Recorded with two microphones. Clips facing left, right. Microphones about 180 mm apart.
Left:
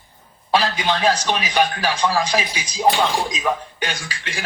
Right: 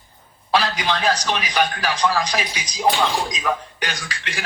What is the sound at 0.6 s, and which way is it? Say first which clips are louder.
A man's voice: left 2 dB; 30° left (ahead or behind).